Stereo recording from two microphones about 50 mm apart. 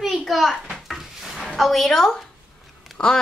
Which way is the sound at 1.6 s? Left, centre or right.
Centre.